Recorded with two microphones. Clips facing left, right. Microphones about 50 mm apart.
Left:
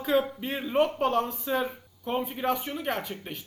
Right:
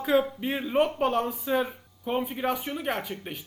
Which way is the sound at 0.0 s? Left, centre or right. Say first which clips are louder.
Right 2 dB; centre.